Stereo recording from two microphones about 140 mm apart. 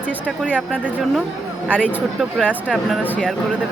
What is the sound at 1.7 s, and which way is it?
Speech, 10° left (ahead or behind).